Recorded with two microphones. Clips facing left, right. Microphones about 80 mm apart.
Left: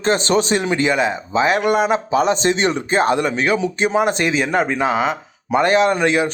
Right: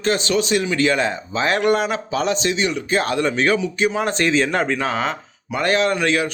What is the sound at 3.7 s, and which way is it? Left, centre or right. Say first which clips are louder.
Speech: left 3 dB; left.